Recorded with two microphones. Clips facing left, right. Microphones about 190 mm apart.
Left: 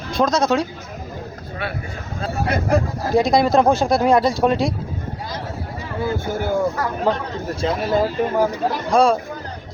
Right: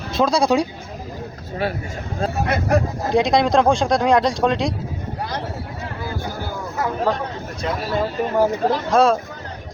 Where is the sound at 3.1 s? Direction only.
Centre (ahead or behind).